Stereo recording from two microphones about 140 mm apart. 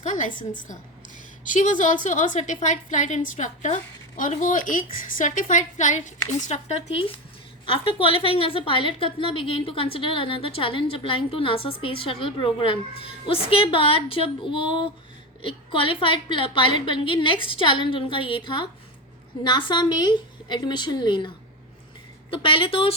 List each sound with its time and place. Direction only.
0.0 s a woman's voice: 65° left (ahead or behind); by 23.0 s 40° left (ahead or behind)